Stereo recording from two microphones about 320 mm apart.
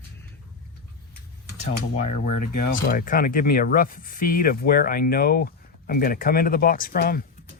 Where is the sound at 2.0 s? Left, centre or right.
Left.